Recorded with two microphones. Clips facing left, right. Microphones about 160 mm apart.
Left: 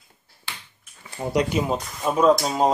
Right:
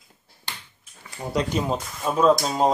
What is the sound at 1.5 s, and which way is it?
Speech, centre (ahead or behind).